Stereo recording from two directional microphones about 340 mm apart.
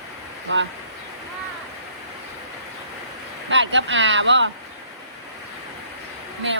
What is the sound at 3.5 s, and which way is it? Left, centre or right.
Speech, right.